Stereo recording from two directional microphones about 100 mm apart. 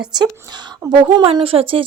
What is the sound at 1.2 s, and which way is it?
Speech, 65° right (ahead or behind).